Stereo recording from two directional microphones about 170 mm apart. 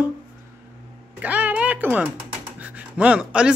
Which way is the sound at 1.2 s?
10° right (ahead or behind).